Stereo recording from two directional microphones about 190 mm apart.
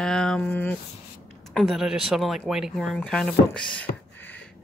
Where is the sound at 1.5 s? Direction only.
Centre (ahead or behind).